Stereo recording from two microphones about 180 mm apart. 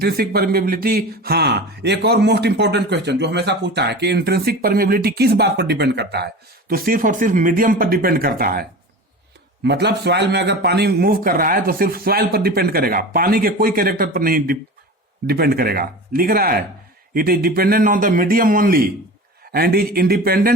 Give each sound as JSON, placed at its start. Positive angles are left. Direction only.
{"t": 0.0, "sound": "speech", "side_deg": -60}
{"t": 9.6, "sound": "a man's voice", "side_deg": -70}